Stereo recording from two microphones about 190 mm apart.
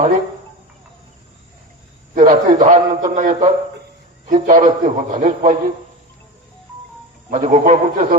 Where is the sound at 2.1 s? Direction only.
40° right (ahead or behind).